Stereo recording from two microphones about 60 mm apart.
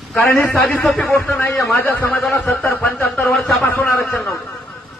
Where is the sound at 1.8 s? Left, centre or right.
Left.